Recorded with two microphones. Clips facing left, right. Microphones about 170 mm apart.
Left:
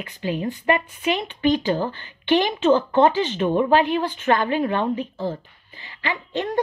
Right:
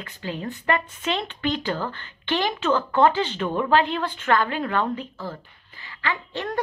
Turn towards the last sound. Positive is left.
turn(degrees=20)  # may be behind; listen again after turning